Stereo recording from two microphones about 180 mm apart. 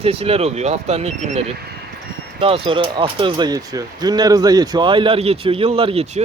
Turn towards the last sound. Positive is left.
turn(degrees=-35)  # may be behind; listen again after turning